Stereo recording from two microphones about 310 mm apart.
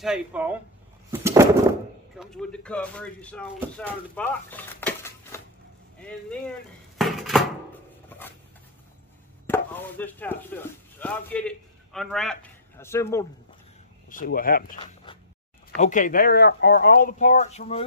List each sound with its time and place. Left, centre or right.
0.0 s speech: centre
1.2 s a sound: centre
2.1 s speech: centre
7.0 s dishes: centre
9.5 s speech: centre
14.0 s speech: left
15.8 s speech: left